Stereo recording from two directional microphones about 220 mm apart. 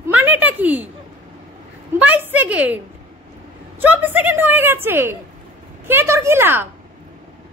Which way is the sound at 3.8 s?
10° right (ahead or behind).